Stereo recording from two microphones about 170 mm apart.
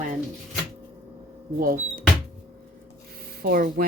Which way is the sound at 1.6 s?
55° right (ahead or behind).